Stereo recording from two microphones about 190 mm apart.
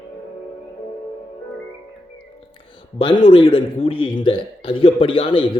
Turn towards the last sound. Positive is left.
turn(degrees=25)  # may be behind; listen again after turning